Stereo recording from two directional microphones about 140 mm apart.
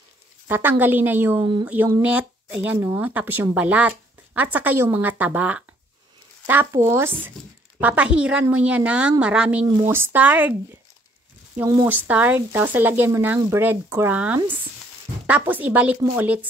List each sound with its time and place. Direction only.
0.5 s speech: 15° right (ahead or behind)
1.4 s speech: 35° right (ahead or behind)
2.0 s speech: 10° right (ahead or behind)
11.9 s speech: 10° right (ahead or behind)